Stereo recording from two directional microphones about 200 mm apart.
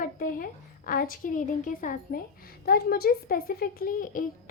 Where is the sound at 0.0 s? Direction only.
45° left (ahead or behind).